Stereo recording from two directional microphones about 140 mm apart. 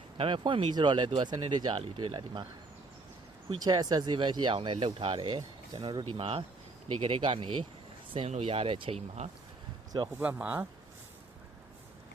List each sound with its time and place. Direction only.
0.2 s speech: 35° right (ahead or behind)
3.6 s speech: 30° right (ahead or behind); by 9.3 s 50° right (ahead or behind)
10.2 s speech: 10° right (ahead or behind)